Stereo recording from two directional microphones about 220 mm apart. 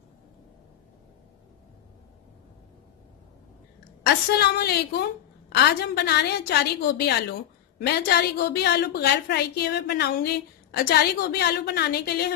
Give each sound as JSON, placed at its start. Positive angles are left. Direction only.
{"t": 4.3, "sound": "a woman's voice", "side_deg": 45}